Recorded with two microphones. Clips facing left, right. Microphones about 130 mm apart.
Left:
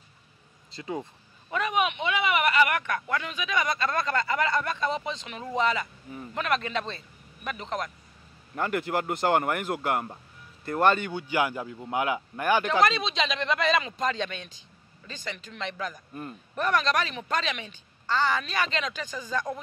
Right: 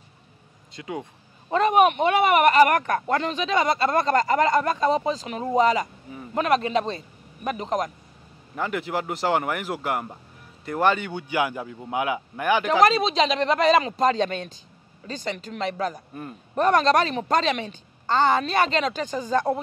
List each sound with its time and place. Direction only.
1.6 s speech: 45° right (ahead or behind)
3.3 s a woman's voice: 25° right (ahead or behind)
8.5 s a man's voice: 5° right (ahead or behind)
12.6 s a woman's voice: 40° right (ahead or behind)